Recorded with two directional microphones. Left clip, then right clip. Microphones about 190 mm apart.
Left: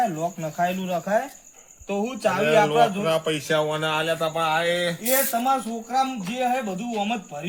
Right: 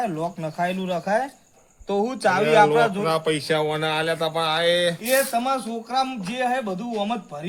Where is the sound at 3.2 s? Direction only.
20° right (ahead or behind).